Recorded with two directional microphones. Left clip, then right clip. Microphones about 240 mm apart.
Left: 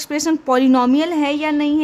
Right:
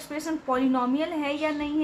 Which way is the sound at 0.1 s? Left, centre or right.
Left.